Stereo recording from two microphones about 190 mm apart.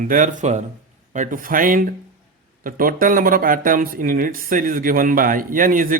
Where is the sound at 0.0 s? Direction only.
45° right (ahead or behind).